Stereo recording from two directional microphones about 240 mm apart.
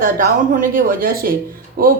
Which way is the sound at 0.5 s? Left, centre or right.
Right.